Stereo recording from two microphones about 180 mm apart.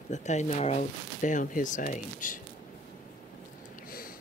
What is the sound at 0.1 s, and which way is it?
Speech, 40° left (ahead or behind).